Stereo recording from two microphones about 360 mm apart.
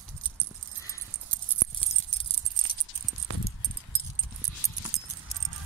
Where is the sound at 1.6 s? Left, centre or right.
Right.